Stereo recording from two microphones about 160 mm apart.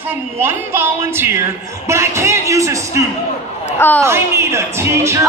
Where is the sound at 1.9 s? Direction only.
15° right (ahead or behind).